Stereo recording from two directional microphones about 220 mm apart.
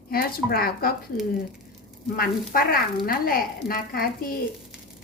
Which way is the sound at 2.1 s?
40° left (ahead or behind).